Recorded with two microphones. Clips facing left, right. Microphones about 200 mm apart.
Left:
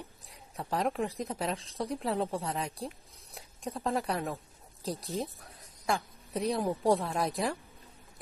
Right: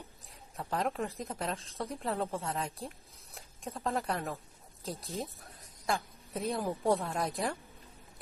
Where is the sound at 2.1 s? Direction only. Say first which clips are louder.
Left 2 dB; 30° left (ahead or behind).